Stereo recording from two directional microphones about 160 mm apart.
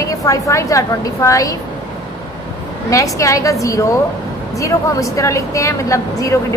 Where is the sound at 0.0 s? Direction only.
20° left (ahead or behind).